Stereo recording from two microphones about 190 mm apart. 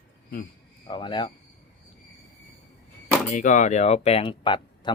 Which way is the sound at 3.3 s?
40° left (ahead or behind).